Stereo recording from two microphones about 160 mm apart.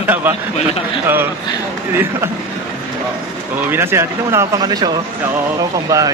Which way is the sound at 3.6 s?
15° right (ahead or behind).